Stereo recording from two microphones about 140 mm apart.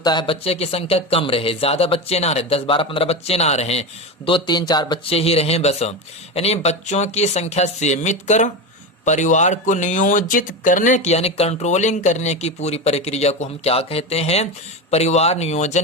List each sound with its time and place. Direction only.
0.0 s speech: 30° left (ahead or behind); by 3.8 s 50° left (ahead or behind)
4.3 s speech: 30° left (ahead or behind); by 15.8 s 55° left (ahead or behind)